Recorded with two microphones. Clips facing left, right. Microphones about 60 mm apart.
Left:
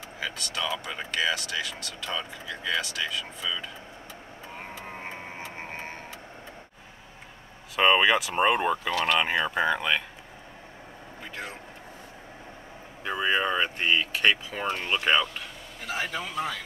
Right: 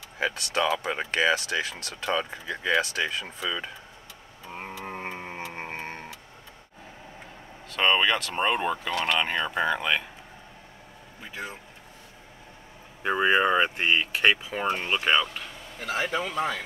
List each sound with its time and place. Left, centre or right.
0.7 s speech: right
4.6 s a sound: right
7.7 s speech: centre
13.0 s speech: right; by 15.4 s centre
15.9 s speech: right